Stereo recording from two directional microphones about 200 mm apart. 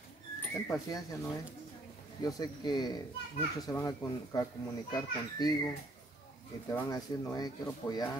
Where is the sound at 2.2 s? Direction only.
20° left (ahead or behind).